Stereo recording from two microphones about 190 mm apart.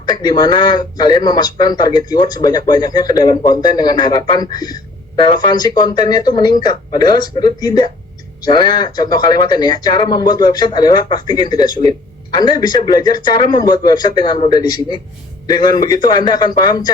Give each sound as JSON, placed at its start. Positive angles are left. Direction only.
{"t": 0.0, "sound": "a man's voice", "side_deg": 20}